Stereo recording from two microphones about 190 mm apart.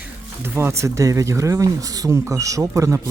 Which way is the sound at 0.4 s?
10° right (ahead or behind).